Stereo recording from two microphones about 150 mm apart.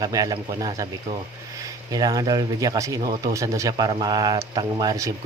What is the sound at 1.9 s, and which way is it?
Speech, 25° right (ahead or behind).